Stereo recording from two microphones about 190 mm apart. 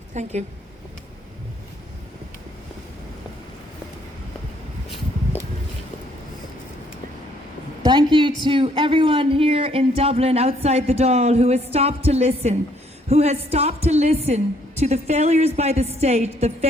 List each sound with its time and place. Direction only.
0.1 s a woman's voice: 35° right (ahead or behind)
7.9 s a man's voice: 25° right (ahead or behind)